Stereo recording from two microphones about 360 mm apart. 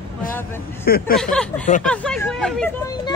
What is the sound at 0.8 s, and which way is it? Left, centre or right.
Speech, left.